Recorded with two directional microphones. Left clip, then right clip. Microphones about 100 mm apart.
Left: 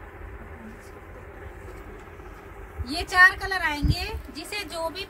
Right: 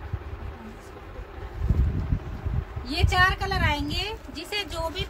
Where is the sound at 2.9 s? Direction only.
20° right (ahead or behind).